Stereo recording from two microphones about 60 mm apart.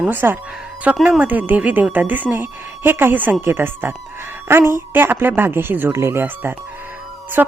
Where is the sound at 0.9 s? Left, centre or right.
Centre.